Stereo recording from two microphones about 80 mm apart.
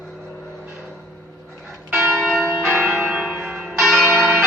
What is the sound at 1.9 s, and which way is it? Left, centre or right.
Church bell, right.